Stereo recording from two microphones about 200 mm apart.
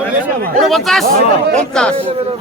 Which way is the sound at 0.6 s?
Centre (ahead or behind).